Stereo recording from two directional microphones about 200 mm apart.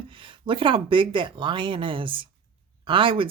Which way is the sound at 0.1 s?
25° right (ahead or behind).